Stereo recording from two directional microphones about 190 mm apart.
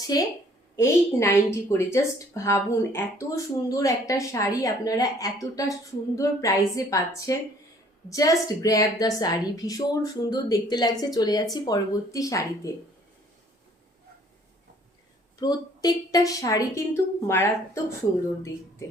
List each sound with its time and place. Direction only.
0.1 s a woman's voice: 20° left (ahead or behind)
15.4 s a woman's voice: 20° left (ahead or behind)